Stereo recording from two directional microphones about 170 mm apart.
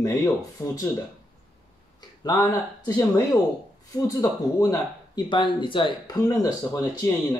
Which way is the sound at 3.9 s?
20° left (ahead or behind).